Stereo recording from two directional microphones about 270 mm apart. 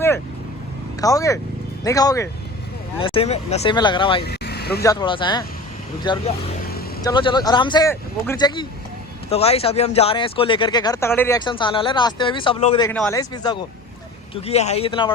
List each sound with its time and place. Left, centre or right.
1.0 s speech: centre
4.3 s vehicle: left
4.8 s speech: centre
12.9 s speech: centre